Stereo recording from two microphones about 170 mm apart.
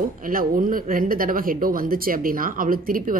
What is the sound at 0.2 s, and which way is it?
Speech, 55° right (ahead or behind).